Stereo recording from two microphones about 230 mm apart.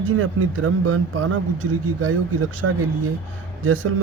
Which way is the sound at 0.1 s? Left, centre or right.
Right.